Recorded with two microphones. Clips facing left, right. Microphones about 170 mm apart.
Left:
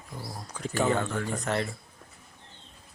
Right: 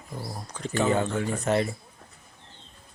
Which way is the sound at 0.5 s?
5° left (ahead or behind).